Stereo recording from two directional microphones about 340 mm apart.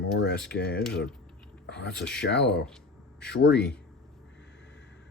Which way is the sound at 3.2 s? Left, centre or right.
Left.